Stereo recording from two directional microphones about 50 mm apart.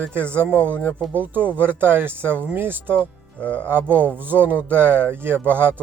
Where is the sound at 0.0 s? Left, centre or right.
Right.